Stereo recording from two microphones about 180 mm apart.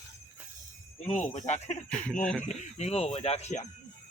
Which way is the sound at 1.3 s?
40° left (ahead or behind).